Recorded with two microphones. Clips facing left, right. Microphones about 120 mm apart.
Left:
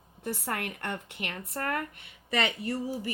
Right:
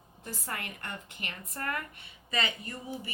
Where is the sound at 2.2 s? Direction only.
70° left (ahead or behind).